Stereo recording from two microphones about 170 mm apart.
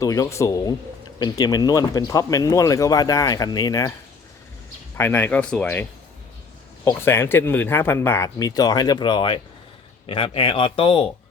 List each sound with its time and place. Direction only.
0.0 s speech: 20° left (ahead or behind)
4.9 s speech: 15° left (ahead or behind)
6.8 s speech: 15° left (ahead or behind); by 11.0 s 30° left (ahead or behind)